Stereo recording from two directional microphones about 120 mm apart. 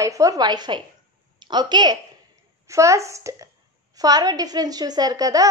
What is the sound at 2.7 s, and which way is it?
A woman's voice, 25° right (ahead or behind).